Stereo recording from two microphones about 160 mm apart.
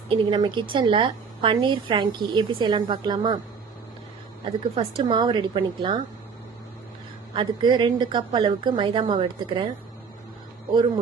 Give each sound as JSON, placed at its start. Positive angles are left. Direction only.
{"t": 0.1, "sound": "a woman's voice", "side_deg": -30}
{"t": 4.7, "sound": "a woman's voice", "side_deg": -35}
{"t": 7.3, "sound": "a woman's voice", "side_deg": -30}